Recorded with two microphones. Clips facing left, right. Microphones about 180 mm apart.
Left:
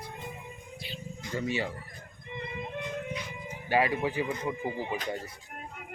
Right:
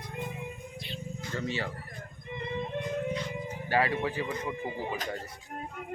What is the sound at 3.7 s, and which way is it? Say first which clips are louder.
Speech: left 1 dB; 15° left (ahead or behind).